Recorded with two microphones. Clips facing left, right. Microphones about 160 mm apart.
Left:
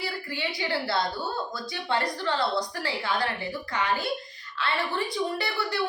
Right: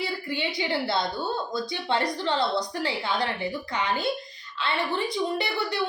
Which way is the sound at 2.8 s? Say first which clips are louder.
Right 1 dB; 20° right (ahead or behind).